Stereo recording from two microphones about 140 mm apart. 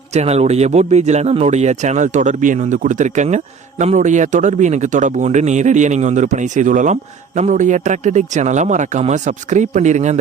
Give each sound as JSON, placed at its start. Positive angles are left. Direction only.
{"t": 0.1, "sound": "speech", "side_deg": -50}